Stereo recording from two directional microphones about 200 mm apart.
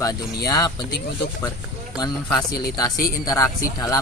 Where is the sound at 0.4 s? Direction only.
20° left (ahead or behind).